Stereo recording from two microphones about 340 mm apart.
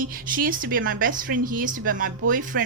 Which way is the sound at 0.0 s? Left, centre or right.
Right.